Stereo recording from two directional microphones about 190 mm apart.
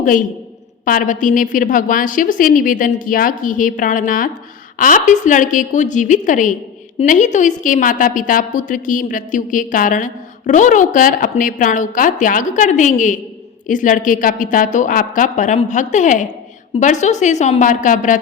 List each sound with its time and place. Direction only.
0.0 s a woman's voice: 45° left (ahead or behind)